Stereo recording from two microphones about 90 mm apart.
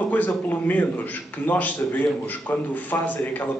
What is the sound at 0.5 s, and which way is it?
A man's voice, 20° left (ahead or behind).